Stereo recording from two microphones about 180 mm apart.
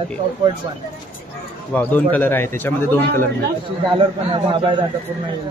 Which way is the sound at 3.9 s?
30° right (ahead or behind).